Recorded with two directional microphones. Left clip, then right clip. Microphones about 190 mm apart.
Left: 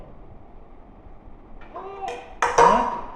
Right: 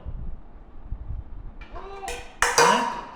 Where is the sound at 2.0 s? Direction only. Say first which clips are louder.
Even; 35° right (ahead or behind).